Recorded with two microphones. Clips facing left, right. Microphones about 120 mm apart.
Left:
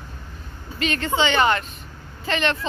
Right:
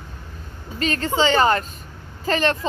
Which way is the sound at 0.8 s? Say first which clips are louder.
Right 2 dB; 35° right (ahead or behind).